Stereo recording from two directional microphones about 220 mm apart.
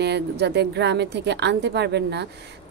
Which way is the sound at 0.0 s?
50° right (ahead or behind).